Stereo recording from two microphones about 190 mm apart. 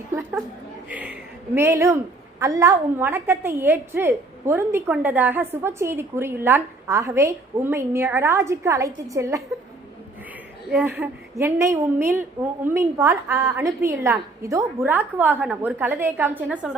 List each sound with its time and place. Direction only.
0.1 s a sound: 10° right (ahead or behind)
2.4 s a woman's voice: 15° right (ahead or behind)
10.7 s a woman's voice: 5° right (ahead or behind)